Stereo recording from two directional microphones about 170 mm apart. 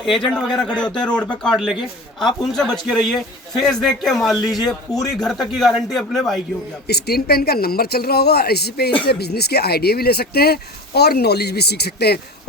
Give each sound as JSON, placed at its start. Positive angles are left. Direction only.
{"t": 0.3, "sound": "a man's voice", "side_deg": 5}
{"t": 4.9, "sound": "speech", "side_deg": 20}
{"t": 5.2, "sound": "a man's voice", "side_deg": 0}
{"t": 6.8, "sound": "speech", "side_deg": 70}